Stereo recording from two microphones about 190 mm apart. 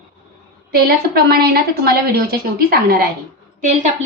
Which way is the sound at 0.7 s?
55° right (ahead or behind).